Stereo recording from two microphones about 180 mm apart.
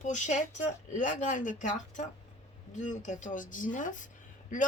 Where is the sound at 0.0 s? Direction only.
40° left (ahead or behind).